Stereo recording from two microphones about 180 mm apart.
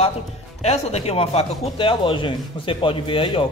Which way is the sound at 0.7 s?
35° left (ahead or behind).